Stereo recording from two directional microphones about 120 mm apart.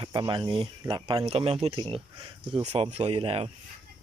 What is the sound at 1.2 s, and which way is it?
Speech, 55° right (ahead or behind).